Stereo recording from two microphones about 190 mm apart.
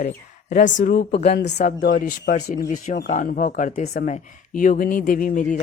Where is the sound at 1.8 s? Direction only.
50° left (ahead or behind).